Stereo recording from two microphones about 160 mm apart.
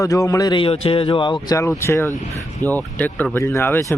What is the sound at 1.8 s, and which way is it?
Speech, 15° left (ahead or behind).